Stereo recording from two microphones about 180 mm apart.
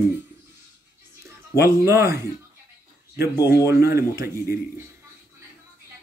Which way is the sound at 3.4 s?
15° right (ahead or behind).